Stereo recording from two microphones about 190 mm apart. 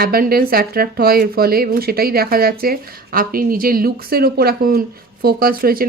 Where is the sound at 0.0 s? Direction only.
50° right (ahead or behind).